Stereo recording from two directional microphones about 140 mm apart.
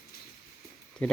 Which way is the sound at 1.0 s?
10° left (ahead or behind).